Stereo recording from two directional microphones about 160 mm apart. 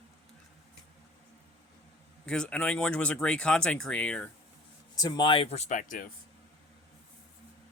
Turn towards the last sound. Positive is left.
turn(degrees=60)  # may be behind; listen again after turning